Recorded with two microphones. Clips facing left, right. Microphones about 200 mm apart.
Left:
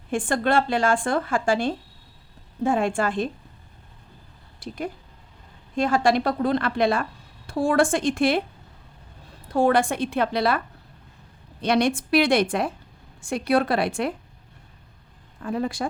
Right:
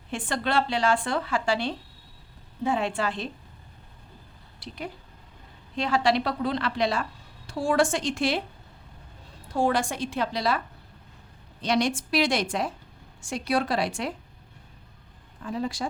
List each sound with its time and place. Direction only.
0.1 s a woman's voice: 50° left (ahead or behind)
4.6 s a woman's voice: 50° left (ahead or behind)
9.5 s a woman's voice: 60° left (ahead or behind)
11.6 s a woman's voice: 60° left (ahead or behind)
15.4 s a woman's voice: 55° left (ahead or behind)